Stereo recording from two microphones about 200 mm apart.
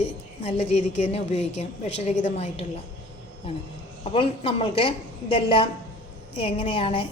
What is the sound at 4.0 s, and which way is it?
A woman's voice, 25° left (ahead or behind).